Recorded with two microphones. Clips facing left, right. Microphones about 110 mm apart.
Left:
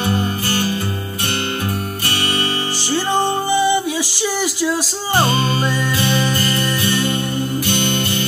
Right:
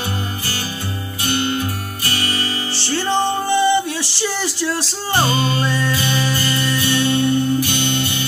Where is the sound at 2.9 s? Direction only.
10° left (ahead or behind).